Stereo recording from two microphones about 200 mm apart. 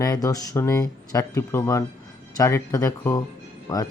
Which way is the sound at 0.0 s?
20° left (ahead or behind).